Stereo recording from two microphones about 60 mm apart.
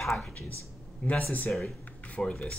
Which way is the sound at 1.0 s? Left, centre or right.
Left.